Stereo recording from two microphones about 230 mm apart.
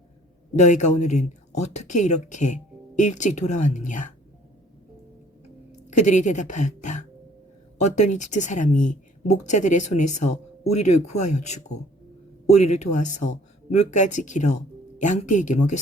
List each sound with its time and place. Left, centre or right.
0.5 s speech: left
5.7 s speech: left